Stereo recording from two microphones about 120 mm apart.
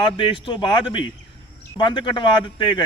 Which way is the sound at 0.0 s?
45° left (ahead or behind).